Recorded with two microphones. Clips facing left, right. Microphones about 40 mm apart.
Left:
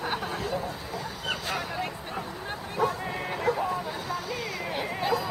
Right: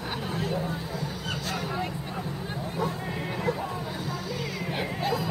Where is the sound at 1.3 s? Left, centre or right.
Centre.